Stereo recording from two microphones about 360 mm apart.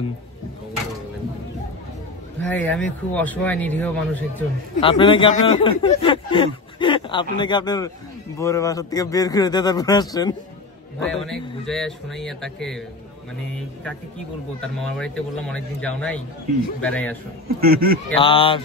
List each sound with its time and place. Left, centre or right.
2.5 s a man's voice: centre
14.6 s speech: centre
17.6 s speech: right
18.2 s a man's voice: centre